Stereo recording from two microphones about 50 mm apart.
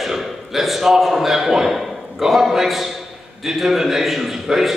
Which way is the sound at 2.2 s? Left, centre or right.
Centre.